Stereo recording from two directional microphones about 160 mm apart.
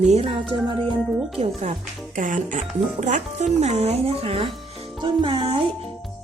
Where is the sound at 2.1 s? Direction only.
55° right (ahead or behind).